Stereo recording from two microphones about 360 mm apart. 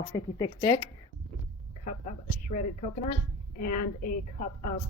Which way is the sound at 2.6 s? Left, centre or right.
Left.